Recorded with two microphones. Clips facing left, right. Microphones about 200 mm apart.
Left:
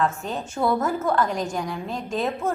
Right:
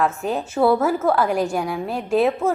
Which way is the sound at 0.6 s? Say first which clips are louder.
Right 6 dB; 70° right (ahead or behind).